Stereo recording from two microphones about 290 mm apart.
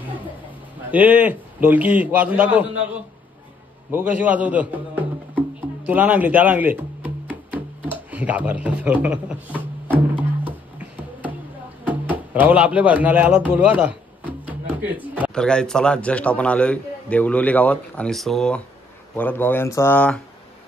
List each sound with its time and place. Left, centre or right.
0.9 s a man's voice: centre
3.9 s a man's voice: centre
8.1 s speech: centre
9.9 s music: centre
11.8 s speech: centre